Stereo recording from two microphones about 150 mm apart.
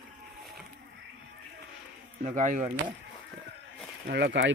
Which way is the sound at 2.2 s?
60° right (ahead or behind).